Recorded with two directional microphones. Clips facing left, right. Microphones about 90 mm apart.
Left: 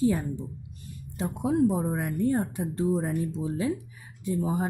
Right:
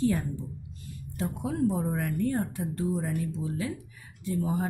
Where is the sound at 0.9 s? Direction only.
20° left (ahead or behind).